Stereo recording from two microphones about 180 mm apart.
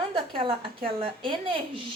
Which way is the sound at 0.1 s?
30° right (ahead or behind).